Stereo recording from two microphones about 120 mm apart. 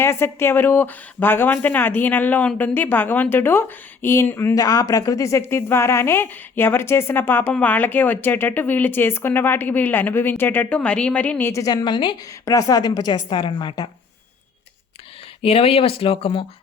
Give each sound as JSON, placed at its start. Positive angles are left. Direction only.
{"t": 0.0, "sound": "a woman's voice", "side_deg": 20}
{"t": 15.4, "sound": "speech", "side_deg": 55}